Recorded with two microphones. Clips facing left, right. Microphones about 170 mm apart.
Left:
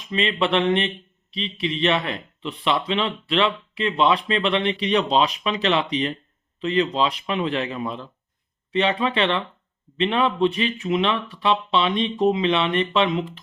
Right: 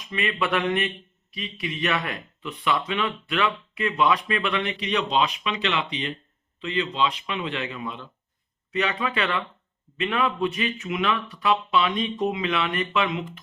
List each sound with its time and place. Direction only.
0.1 s speech: 25° left (ahead or behind)